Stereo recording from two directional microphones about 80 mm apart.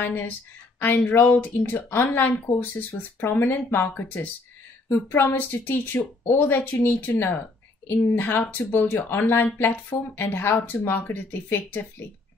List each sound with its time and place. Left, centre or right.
0.0 s speech: left